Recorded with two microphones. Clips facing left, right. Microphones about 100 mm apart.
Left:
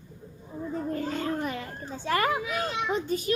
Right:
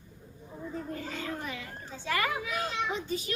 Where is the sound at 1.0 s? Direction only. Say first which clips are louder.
Left 7 dB; 45° left (ahead or behind).